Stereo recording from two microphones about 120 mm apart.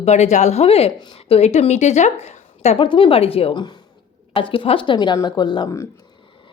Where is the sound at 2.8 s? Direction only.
45° left (ahead or behind).